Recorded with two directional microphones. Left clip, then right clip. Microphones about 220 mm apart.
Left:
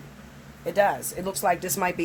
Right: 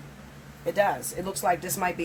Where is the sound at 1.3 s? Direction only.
45° left (ahead or behind).